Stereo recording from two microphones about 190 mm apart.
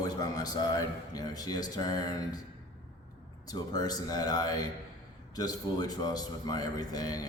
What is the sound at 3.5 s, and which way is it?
A man's voice, 20° left (ahead or behind).